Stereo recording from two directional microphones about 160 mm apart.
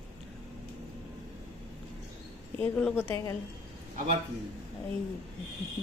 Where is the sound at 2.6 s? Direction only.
10° left (ahead or behind).